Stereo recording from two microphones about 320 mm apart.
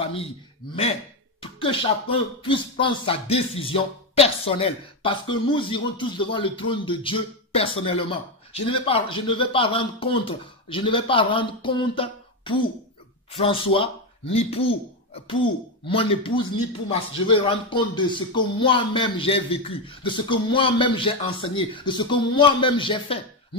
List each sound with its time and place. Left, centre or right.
0.0 s a man's voice: centre
1.4 s speech: centre